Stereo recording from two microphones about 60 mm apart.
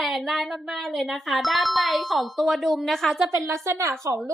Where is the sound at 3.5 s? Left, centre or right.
Right.